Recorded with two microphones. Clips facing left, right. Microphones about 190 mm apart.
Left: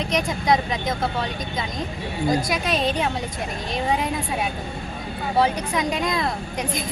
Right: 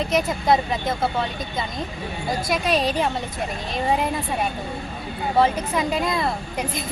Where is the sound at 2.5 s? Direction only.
Centre (ahead or behind).